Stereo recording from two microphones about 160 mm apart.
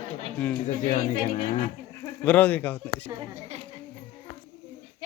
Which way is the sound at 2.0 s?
10° left (ahead or behind).